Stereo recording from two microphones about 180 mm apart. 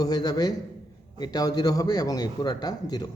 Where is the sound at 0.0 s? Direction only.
20° left (ahead or behind).